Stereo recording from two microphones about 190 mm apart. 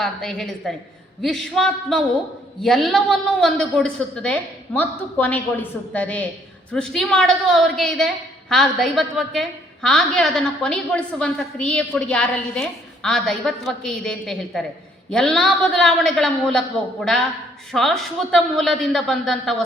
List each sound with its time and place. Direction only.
0.0 s a woman's voice: centre (ahead or behind)